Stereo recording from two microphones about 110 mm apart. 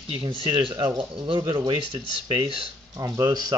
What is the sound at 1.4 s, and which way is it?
Speech, 30° right (ahead or behind).